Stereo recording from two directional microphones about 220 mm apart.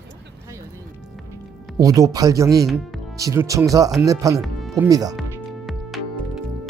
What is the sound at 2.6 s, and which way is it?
Speech, centre (ahead or behind).